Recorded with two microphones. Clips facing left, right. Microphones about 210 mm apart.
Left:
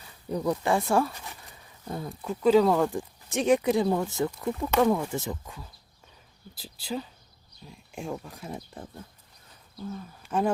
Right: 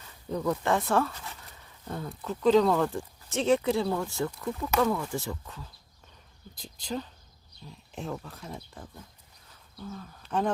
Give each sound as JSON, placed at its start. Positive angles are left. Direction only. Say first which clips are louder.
{"t": 0.0, "sound": "speech", "louder": "left 1 dB", "side_deg": 10}
{"t": 9.9, "sound": "speech", "louder": "left 1 dB", "side_deg": 10}